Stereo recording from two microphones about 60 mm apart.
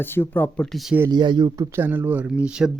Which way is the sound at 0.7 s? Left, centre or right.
Centre.